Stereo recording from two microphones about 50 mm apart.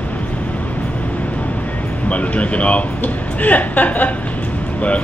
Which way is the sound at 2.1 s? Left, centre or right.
Left.